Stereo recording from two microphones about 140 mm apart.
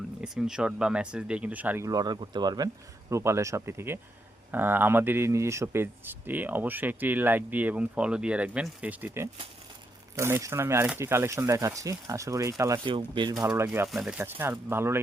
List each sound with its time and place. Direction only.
0.2 s speech: 5° right (ahead or behind)
1.9 s speech: 30° right (ahead or behind)
12.8 s speech: 35° right (ahead or behind)
13.4 s speech: 15° right (ahead or behind)
13.8 s speech: 5° right (ahead or behind)
14.3 s speech: 15° right (ahead or behind)